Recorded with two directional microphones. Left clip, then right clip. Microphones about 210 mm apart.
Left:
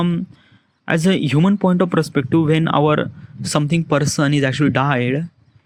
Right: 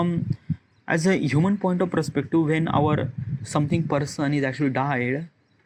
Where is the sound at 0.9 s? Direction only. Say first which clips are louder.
Left 4 dB; 70° left (ahead or behind).